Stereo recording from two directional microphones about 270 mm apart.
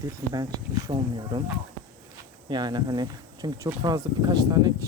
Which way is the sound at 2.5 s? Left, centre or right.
Centre.